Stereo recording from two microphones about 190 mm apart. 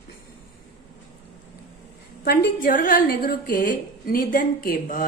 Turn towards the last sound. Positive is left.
turn(degrees=50)  # may be behind; listen again after turning